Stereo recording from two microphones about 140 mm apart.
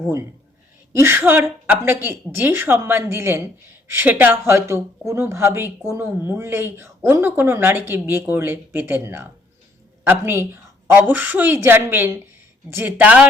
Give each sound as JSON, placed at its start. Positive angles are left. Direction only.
{"t": 0.9, "sound": "speech", "side_deg": -15}